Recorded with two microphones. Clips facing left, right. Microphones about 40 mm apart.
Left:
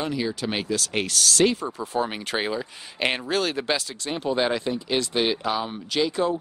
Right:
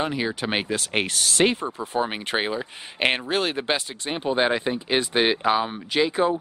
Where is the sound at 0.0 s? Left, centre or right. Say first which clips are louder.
Right 1 dB; right.